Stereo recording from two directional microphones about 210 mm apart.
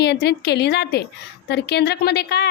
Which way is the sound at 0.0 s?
50° left (ahead or behind).